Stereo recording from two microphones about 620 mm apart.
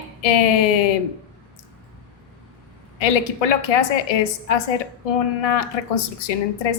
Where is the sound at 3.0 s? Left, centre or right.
Left.